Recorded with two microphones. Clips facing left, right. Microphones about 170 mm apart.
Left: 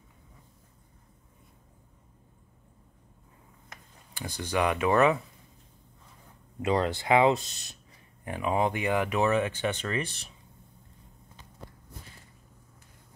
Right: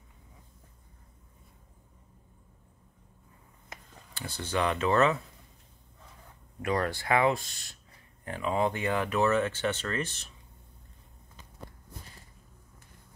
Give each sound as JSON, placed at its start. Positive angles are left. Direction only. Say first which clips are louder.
{"t": 4.1, "sound": "speech", "louder": "left 2 dB", "side_deg": 15}
{"t": 6.6, "sound": "speech", "louder": "left 3 dB", "side_deg": 20}